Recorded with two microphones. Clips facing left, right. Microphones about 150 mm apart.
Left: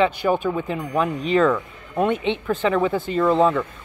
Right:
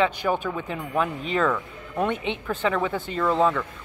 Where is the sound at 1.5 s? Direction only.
15° left (ahead or behind).